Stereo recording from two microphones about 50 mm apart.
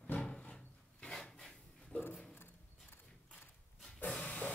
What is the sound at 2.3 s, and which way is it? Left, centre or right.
Horse, left.